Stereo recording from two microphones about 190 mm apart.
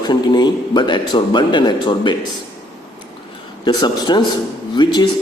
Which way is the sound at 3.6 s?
20° left (ahead or behind).